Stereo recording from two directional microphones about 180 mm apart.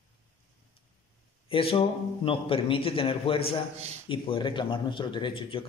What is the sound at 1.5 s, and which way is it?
A man's voice, 30° left (ahead or behind).